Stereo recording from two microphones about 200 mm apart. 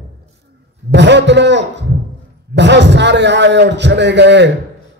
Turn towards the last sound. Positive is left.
turn(degrees=-60)  # may be behind; listen again after turning